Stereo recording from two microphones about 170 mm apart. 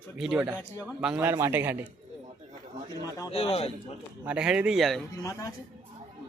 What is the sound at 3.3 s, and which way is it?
Speech, 35° left (ahead or behind).